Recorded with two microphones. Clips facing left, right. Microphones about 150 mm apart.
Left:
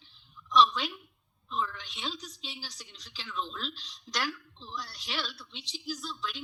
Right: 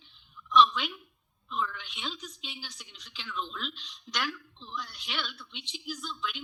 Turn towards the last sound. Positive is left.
turn(degrees=35)  # may be behind; listen again after turning